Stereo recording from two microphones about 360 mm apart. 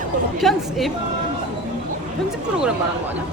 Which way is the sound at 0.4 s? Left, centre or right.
Centre.